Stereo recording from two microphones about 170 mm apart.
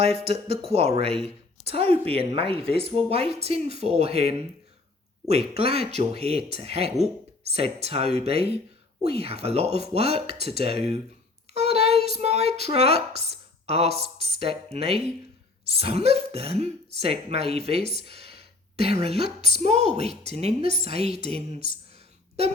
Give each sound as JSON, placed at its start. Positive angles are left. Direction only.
{"t": 0.0, "sound": "a child's voice", "side_deg": -35}